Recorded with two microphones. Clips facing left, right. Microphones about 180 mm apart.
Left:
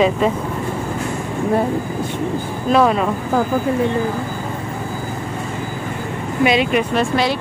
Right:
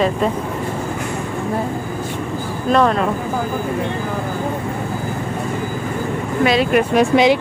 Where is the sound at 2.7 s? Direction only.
5° left (ahead or behind).